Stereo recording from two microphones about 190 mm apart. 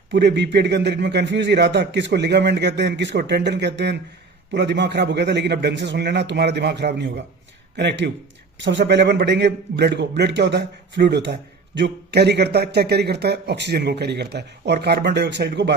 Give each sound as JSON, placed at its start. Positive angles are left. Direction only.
{"t": 0.1, "sound": "a man's voice", "side_deg": -65}